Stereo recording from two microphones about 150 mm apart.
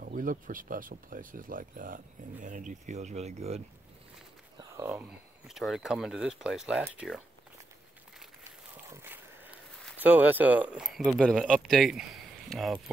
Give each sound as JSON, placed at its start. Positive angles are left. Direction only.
{"t": 0.0, "sound": "speech", "side_deg": -65}
{"t": 4.6, "sound": "speech", "side_deg": -20}
{"t": 5.5, "sound": "speech", "side_deg": 0}
{"t": 8.9, "sound": "a sound", "side_deg": -15}
{"t": 9.9, "sound": "speech", "side_deg": -10}